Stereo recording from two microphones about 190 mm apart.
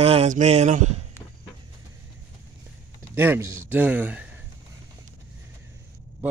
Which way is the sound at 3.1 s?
10° right (ahead or behind).